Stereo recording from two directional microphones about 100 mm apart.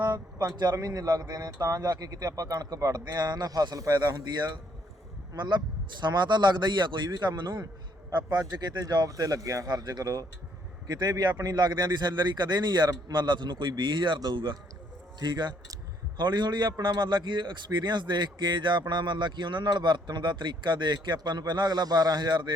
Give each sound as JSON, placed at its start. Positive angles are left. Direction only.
{"t": 0.0, "sound": "a man's voice", "side_deg": -45}